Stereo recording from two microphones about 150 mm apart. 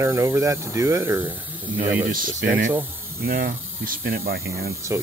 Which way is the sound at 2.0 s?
65° right (ahead or behind).